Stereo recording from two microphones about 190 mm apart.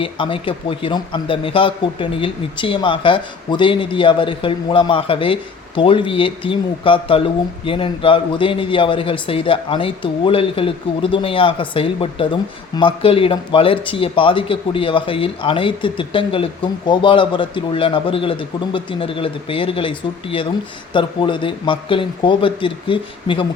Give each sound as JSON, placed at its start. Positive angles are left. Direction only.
{"t": 0.0, "sound": "a man's voice", "side_deg": 25}